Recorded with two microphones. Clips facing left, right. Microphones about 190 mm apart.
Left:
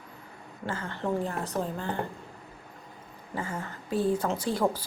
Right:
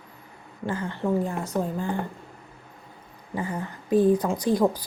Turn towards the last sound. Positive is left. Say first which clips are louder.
# right 5 dB
turn(degrees=-15)  # may be behind; listen again after turning